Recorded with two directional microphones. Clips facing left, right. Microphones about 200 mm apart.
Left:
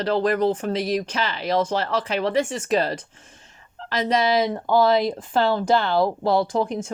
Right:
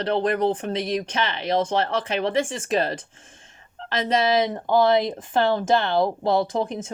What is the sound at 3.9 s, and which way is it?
Speech, 25° right (ahead or behind).